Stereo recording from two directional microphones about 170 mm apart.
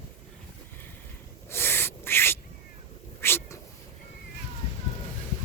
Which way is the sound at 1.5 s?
15° left (ahead or behind).